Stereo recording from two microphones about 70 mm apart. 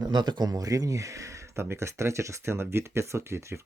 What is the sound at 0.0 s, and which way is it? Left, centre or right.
Speech, right.